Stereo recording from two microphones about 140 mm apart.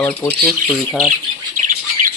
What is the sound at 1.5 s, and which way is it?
Squawk, 65° right (ahead or behind).